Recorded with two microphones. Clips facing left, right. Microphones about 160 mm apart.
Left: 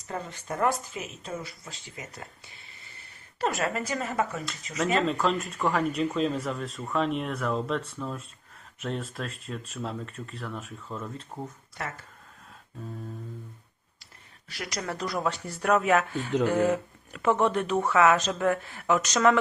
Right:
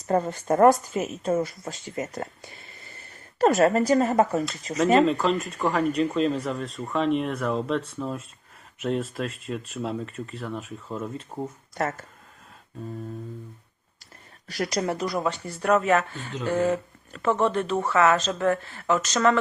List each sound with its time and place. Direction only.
0.1 s speech: 45° right (ahead or behind)
3.3 s speech: 45° right (ahead or behind)
5.0 s speech: centre (ahead or behind)
11.8 s speech: 45° right (ahead or behind)
14.5 s speech: 40° right (ahead or behind)
14.9 s speech: centre (ahead or behind)